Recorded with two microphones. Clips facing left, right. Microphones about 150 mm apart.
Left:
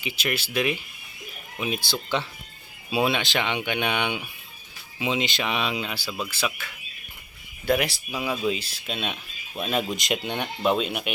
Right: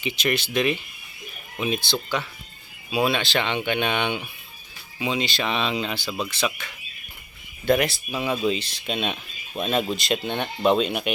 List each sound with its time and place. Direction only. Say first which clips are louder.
0.0 s speech: right 4 dB; 5° left (ahead or behind)
2.9 s speech: right 1 dB; 20° left (ahead or behind); by 11.1 s 5° left (ahead or behind)